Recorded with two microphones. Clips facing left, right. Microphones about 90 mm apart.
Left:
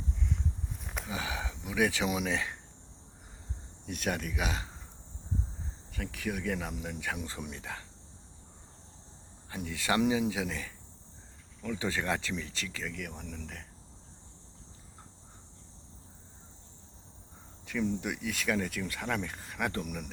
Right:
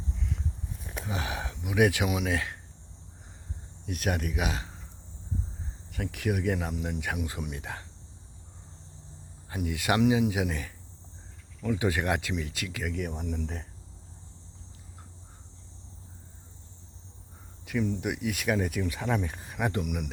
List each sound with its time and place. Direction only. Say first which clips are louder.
0.2 s a sound: left 1 dB; centre (ahead or behind)
1.0 s speech: right 3 dB; 15° right (ahead or behind)
3.8 s speech: right 3 dB; 5° right (ahead or behind)
6.0 s speech: right 5 dB; 15° right (ahead or behind)
9.5 s speech: right 4 dB; 15° right (ahead or behind)
17.7 s speech: right 3 dB; 10° right (ahead or behind)